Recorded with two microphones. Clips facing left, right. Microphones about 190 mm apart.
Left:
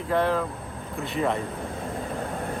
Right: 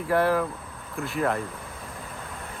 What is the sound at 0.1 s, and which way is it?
Speech, 5° right (ahead or behind).